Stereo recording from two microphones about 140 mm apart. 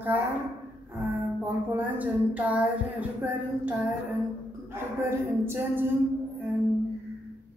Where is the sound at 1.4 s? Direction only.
10° right (ahead or behind).